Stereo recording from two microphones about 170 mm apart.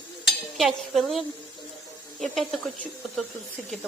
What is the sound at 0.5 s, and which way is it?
Speech, centre (ahead or behind).